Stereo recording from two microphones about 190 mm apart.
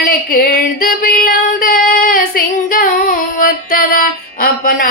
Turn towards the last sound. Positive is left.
turn(degrees=50)  # may be behind; listen again after turning